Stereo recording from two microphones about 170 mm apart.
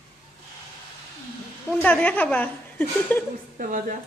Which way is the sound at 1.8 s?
10° left (ahead or behind).